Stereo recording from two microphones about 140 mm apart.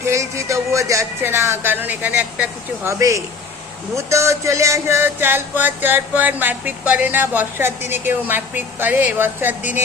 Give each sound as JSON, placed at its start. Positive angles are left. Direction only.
{"t": 0.0, "sound": "music", "side_deg": -20}
{"t": 2.8, "sound": "speech", "side_deg": -20}
{"t": 3.9, "sound": "music", "side_deg": -20}